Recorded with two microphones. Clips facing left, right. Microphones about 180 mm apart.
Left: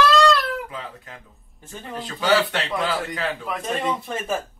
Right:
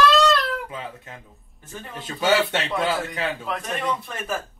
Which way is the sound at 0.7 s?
25° right (ahead or behind).